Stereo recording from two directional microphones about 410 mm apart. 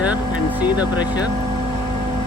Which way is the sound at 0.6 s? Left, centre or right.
Centre.